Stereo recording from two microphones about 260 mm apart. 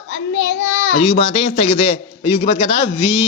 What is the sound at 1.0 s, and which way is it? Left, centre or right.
A man's voice, left.